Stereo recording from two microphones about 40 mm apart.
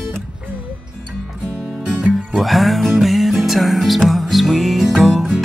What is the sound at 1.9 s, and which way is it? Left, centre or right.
Music, right.